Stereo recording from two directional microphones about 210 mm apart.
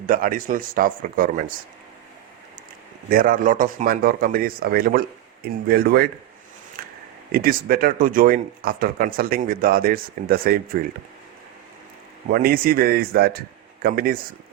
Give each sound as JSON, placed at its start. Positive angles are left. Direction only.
{"t": 0.1, "sound": "speech", "side_deg": -40}
{"t": 3.1, "sound": "speech", "side_deg": -40}
{"t": 6.8, "sound": "a sound", "side_deg": -45}
{"t": 7.3, "sound": "speech", "side_deg": -45}
{"t": 12.3, "sound": "speech", "side_deg": -45}